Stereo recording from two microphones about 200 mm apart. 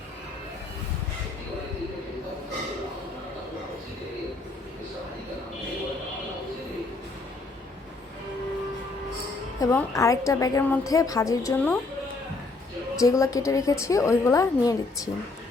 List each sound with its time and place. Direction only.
9.6 s a woman's voice: 15° left (ahead or behind)
13.0 s a woman's voice: 15° left (ahead or behind)